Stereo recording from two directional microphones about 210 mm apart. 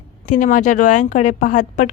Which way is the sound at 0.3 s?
35° left (ahead or behind).